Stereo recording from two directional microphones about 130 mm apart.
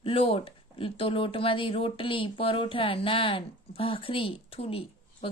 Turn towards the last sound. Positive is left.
turn(degrees=45)  # may be behind; listen again after turning